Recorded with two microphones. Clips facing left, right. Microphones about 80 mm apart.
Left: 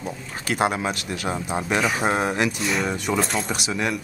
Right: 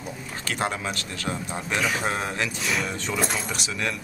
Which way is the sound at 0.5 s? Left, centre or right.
Centre.